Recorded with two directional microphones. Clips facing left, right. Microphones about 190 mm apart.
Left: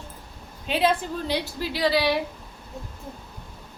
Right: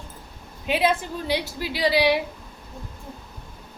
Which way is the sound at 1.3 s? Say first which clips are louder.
Right 3 dB; 15° right (ahead or behind).